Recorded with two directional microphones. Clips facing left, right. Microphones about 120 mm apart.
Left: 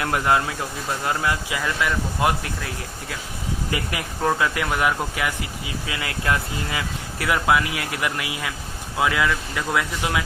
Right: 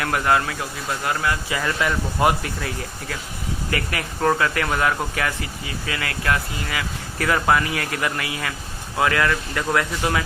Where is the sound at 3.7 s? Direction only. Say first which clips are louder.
Right 3 dB; 20° left (ahead or behind).